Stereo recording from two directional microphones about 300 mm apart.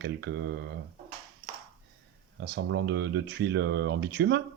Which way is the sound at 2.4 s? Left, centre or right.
Right.